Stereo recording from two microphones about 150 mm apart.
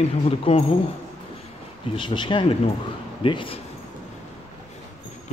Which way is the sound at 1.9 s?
35° left (ahead or behind).